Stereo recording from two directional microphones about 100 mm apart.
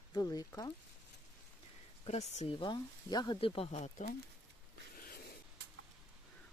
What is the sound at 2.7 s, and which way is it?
Speech, 45° left (ahead or behind).